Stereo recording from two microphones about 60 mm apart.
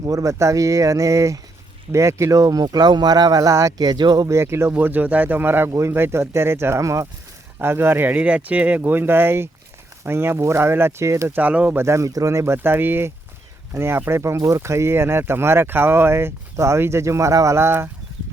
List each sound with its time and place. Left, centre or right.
0.0 s speech: right
4.3 s speech: right
4.8 s speech: right
7.6 s speech: right
11.3 s speech: right
11.9 s speech: right
12.6 s speech: right